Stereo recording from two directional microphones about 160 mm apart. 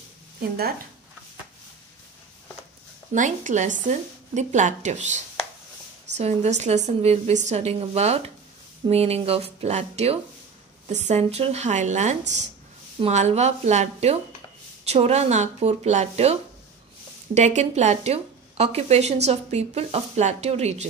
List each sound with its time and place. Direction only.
0.4 s speech: 75° right (ahead or behind)
3.1 s a woman's voice: 50° right (ahead or behind)